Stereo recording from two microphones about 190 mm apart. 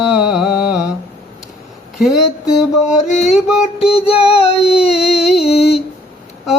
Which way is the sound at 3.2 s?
5° right (ahead or behind).